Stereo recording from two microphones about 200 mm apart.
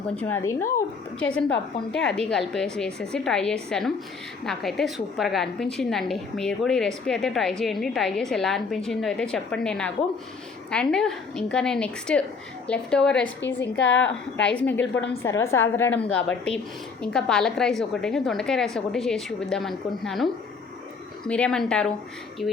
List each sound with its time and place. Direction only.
0.8 s a woman's voice: 5° left (ahead or behind)
13.6 s a woman's voice: 65° left (ahead or behind)
14.5 s a woman's voice: 10° left (ahead or behind)